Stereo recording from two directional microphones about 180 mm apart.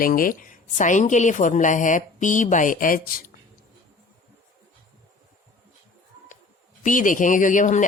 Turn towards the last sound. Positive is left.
turn(degrees=45)  # may be behind; listen again after turning